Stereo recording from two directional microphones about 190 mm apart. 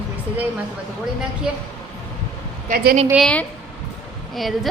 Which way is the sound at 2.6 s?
50° right (ahead or behind).